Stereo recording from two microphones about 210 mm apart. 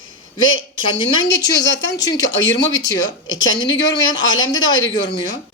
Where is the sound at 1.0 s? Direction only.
55° left (ahead or behind).